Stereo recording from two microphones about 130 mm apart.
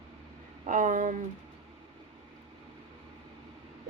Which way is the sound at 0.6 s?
85° right.